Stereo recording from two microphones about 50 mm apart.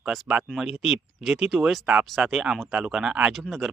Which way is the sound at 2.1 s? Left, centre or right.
Centre.